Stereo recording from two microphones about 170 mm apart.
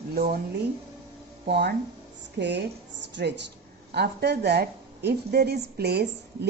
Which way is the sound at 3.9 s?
80° right.